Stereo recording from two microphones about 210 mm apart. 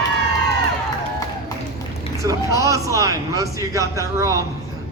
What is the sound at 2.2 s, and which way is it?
A man's voice, 15° right (ahead or behind).